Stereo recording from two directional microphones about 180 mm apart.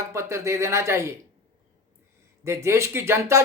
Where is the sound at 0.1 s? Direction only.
15° right (ahead or behind).